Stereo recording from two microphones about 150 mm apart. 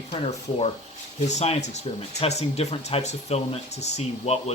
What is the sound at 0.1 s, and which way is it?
Speech, 45° left (ahead or behind).